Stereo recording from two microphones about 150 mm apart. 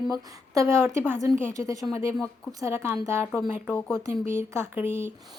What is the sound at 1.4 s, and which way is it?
A woman's voice, 20° right (ahead or behind).